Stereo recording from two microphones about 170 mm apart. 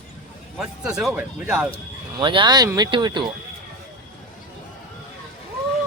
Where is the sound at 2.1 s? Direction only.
30° right (ahead or behind).